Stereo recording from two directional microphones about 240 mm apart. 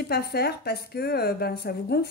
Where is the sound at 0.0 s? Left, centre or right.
Left.